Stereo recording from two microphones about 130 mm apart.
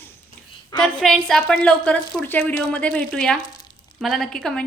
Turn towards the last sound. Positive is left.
turn(degrees=5)  # may be behind; listen again after turning